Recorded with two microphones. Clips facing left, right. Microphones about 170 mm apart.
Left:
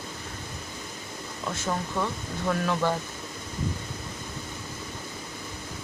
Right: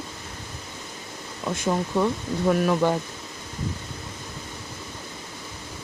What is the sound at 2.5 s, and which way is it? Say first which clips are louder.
Speech: right 5 dB; 15° right (ahead or behind).